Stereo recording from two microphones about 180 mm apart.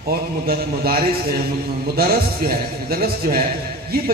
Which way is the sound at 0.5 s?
55° right (ahead or behind).